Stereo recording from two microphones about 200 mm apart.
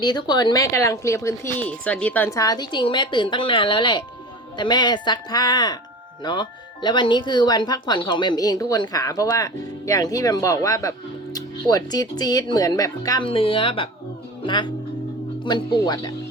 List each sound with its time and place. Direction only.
0.0 s speech: 20° left (ahead or behind)